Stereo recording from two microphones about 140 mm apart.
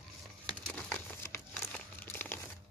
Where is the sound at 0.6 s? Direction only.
10° left (ahead or behind).